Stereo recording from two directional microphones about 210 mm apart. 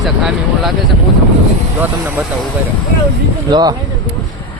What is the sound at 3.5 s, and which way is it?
Speech, 20° right (ahead or behind).